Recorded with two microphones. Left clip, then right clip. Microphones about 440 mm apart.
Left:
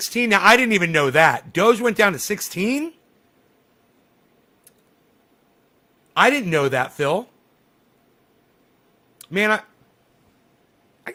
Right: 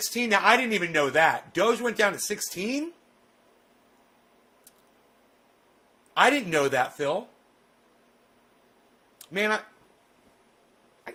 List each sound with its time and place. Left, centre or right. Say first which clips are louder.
0.1 s speech: left 7 dB; left
6.1 s speech: left 5 dB; left
9.1 s a sound: left 7 dB; left